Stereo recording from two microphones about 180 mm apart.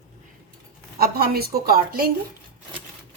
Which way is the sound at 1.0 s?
55° right (ahead or behind).